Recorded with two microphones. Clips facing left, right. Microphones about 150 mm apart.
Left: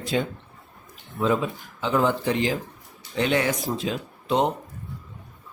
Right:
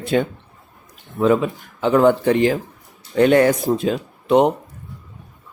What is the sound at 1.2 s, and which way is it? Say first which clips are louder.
A man's voice: right 7 dB; 65° right (ahead or behind).